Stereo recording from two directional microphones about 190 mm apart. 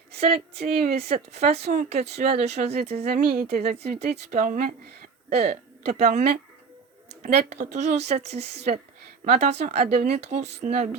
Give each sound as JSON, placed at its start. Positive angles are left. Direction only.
{"t": 0.1, "sound": "speech", "side_deg": -35}